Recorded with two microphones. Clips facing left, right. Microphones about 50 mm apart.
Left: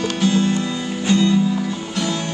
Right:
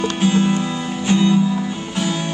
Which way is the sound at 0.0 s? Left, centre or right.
Centre.